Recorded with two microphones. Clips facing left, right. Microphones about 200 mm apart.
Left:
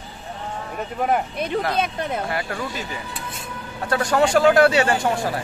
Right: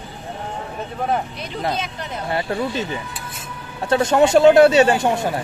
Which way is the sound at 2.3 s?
25° right (ahead or behind).